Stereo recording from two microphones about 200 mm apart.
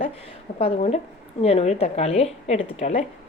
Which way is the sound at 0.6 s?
30° left (ahead or behind).